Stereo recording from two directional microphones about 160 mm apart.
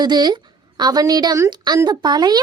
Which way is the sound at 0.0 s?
25° right (ahead or behind).